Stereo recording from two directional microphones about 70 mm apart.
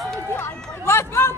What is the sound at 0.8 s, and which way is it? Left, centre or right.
Run, left.